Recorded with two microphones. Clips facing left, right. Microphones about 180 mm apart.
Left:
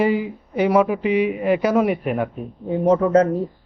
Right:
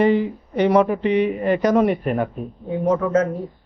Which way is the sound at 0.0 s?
5° left (ahead or behind).